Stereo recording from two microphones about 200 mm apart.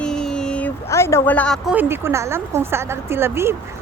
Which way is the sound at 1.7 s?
10° right (ahead or behind).